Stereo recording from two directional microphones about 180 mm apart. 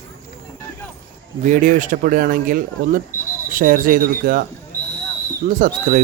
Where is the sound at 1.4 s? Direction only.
45° right (ahead or behind).